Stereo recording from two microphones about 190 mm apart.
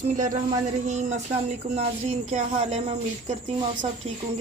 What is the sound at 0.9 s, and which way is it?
Speech, 40° right (ahead or behind).